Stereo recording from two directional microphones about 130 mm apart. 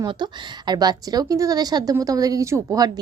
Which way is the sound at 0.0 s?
35° right (ahead or behind).